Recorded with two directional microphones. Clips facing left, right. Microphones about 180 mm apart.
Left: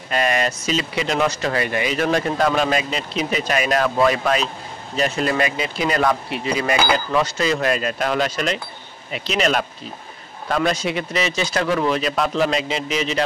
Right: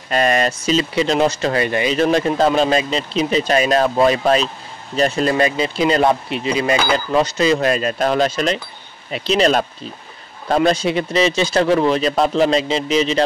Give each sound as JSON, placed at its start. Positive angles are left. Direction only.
{"t": 0.1, "sound": "speech", "side_deg": -35}